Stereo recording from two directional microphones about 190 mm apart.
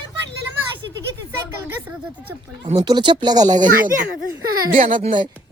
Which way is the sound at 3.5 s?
45° right (ahead or behind).